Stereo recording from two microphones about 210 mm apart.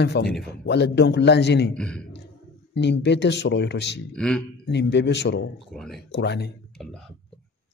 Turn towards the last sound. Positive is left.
turn(degrees=5)  # may be behind; listen again after turning